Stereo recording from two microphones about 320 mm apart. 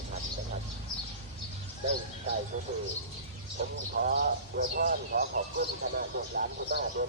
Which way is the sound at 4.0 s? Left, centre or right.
Right.